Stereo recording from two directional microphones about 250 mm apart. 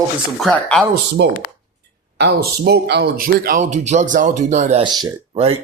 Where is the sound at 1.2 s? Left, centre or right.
Right.